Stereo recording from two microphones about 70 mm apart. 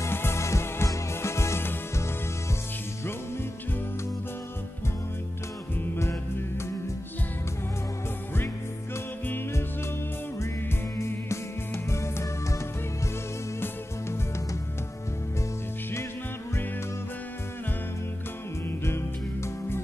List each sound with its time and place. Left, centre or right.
0.0 s music: left
8.9 s music: left
11.0 s music: left
18.9 s music: left